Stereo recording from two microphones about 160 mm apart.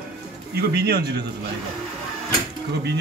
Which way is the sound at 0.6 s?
85° right.